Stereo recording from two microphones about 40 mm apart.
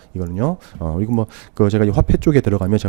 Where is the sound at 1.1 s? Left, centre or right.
Right.